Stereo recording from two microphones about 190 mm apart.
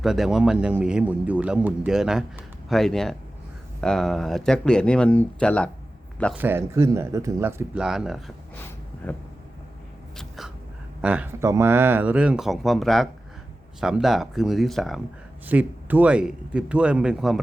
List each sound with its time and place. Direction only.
0.0 s a man's voice: centre (ahead or behind)
6.3 s speech: 10° right (ahead or behind)
9.0 s a sound: 10° left (ahead or behind)
11.0 s a man's voice: 5° right (ahead or behind)